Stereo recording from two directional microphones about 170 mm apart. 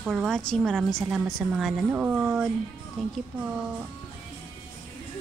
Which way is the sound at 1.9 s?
10° right (ahead or behind).